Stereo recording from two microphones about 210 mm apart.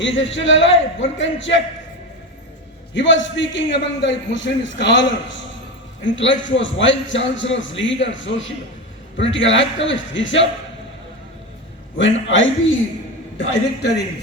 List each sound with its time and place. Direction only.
0.0 s a man's voice: 60° left (ahead or behind)
2.9 s a man's voice: 60° left (ahead or behind)
11.9 s a man's voice: 65° left (ahead or behind)
13.4 s a man's voice: 55° left (ahead or behind)